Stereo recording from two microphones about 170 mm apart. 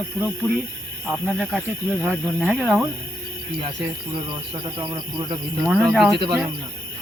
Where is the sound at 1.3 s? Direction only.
5° left (ahead or behind).